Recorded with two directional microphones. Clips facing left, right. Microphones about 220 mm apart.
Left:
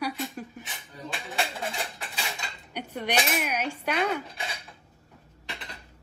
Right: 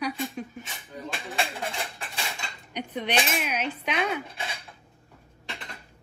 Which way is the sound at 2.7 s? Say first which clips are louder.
Right 1 dB; 10° left (ahead or behind).